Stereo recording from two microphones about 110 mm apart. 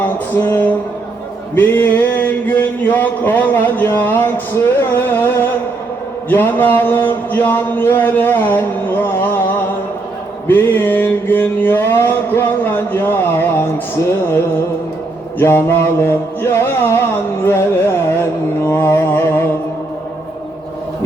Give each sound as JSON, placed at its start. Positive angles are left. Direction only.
{"t": 0.0, "sound": "music", "side_deg": 15}
{"t": 1.5, "sound": "a sound", "side_deg": 15}
{"t": 6.2, "sound": "a man's voice", "side_deg": 20}
{"t": 10.4, "sound": "mantra", "side_deg": 20}
{"t": 15.4, "sound": "music", "side_deg": 20}